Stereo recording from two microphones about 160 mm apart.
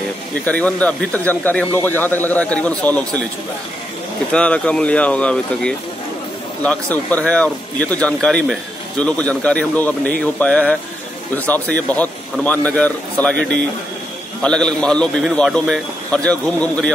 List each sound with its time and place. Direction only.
0.5 s speech: 10° left (ahead or behind)
4.3 s speech: 5° left (ahead or behind)
13.4 s a man's voice: 90° right
14.4 s a man's voice: 5° left (ahead or behind)